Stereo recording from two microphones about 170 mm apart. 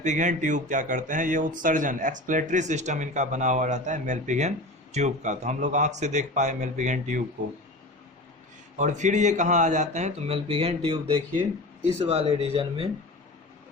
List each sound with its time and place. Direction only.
0.0 s a man's voice: 45° right (ahead or behind)
8.8 s a man's voice: 45° right (ahead or behind)